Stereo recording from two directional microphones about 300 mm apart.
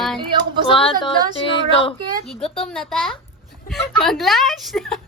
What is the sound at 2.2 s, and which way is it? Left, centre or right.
A woman's voice, centre.